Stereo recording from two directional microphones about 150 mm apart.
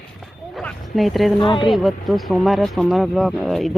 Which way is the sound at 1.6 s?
Centre (ahead or behind).